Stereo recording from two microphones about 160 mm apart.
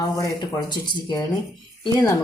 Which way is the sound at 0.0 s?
25° left (ahead or behind).